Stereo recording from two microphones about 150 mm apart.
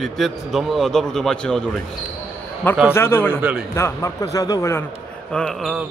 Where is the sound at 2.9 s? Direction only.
15° left (ahead or behind).